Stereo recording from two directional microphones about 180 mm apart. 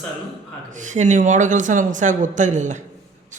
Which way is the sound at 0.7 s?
45° right (ahead or behind).